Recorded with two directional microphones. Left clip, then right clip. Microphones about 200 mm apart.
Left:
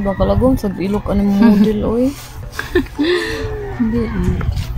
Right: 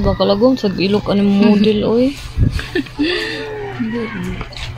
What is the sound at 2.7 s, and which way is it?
Speech, 55° left (ahead or behind).